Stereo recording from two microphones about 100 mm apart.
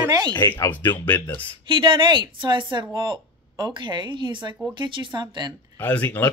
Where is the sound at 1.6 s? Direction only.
55° right (ahead or behind).